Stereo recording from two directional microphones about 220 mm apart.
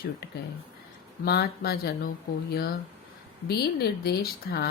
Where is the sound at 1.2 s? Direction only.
45° left (ahead or behind).